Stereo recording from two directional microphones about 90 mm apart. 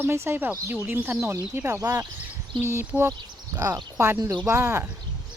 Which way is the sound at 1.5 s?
35° right (ahead or behind).